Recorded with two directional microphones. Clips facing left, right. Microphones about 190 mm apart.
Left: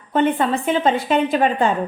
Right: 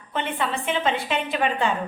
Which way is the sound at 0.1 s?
40° left (ahead or behind).